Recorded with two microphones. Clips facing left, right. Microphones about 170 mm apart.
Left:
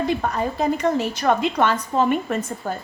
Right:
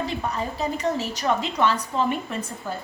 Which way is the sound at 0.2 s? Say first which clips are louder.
Left 4 dB; 55° left (ahead or behind).